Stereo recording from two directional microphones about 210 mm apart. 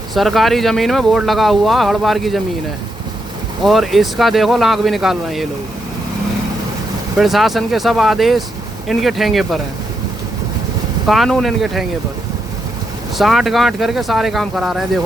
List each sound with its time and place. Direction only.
0.1 s speech: centre (ahead or behind)
3.6 s speech: centre (ahead or behind)
7.2 s speech: centre (ahead or behind)
11.0 s speech: centre (ahead or behind)
13.1 s speech: centre (ahead or behind)